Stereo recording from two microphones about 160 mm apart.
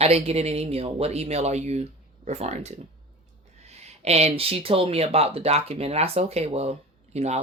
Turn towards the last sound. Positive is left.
turn(degrees=-45)  # may be behind; listen again after turning